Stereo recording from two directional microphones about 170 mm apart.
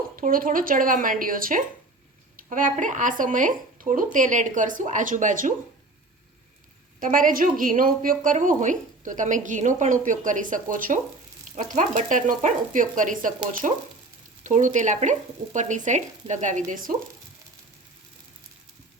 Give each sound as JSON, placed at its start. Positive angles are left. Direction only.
{"t": 0.2, "sound": "speech", "side_deg": -55}
{"t": 7.0, "sound": "speech", "side_deg": -55}